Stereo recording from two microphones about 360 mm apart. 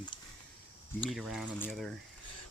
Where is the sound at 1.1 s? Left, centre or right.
Centre.